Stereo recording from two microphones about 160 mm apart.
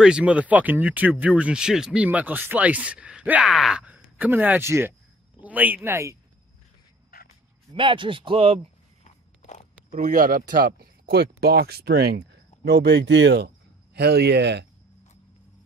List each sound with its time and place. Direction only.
0.0 s speech: 5° right (ahead or behind)
7.1 s a sound: 65° left (ahead or behind)
7.7 s speech: 30° right (ahead or behind)
9.0 s biting: 45° left (ahead or behind)
9.8 s speech: 55° right (ahead or behind); by 14.7 s 90° right